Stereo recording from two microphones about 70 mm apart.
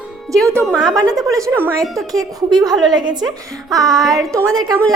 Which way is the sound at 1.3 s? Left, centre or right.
Right.